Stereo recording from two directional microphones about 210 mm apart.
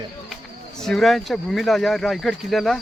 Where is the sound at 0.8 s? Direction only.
Centre (ahead or behind).